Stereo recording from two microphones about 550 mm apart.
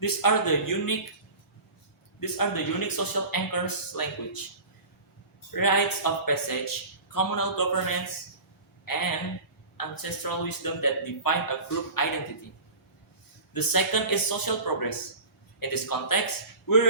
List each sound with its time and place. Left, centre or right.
0.0 s speech: left
2.2 s speech: left
5.5 s speech: left
8.8 s a sound: left
9.7 s speech: left
13.5 s speech: left